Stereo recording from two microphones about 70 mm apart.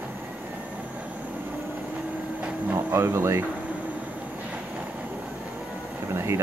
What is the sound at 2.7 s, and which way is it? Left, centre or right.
Speech, right.